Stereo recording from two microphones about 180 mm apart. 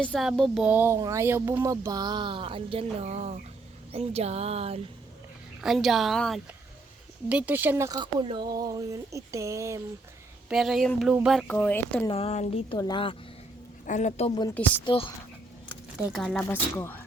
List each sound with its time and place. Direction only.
0.0 s speech: 5° left (ahead or behind); by 3.3 s 35° right (ahead or behind)
3.9 s a sound: 35° right (ahead or behind)
5.5 s speech: centre (ahead or behind)
7.9 s speech: 25° right (ahead or behind)
10.5 s speech: centre (ahead or behind)
11.4 s speech: 10° left (ahead or behind)
12.0 s speech: 30° left (ahead or behind)
12.7 s a woman's voice: 25° left (ahead or behind)
13.8 s speech: 40° left (ahead or behind)
14.6 s speech: 5° left (ahead or behind)
16.0 s speech: 5° right (ahead or behind)
16.4 s speech: 10° left (ahead or behind)